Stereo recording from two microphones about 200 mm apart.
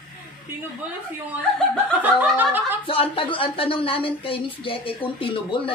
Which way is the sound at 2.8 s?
25° left (ahead or behind).